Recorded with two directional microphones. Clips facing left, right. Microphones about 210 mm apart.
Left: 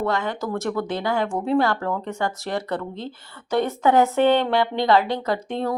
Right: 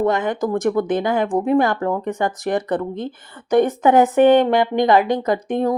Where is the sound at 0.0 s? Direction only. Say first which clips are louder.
Right 6 dB; 20° right (ahead or behind).